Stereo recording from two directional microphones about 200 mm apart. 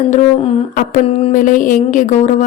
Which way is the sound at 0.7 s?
45° left (ahead or behind).